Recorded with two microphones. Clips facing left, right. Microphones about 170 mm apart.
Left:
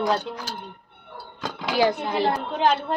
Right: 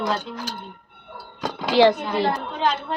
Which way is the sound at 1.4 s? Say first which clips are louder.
Right 4 dB; 35° right (ahead or behind).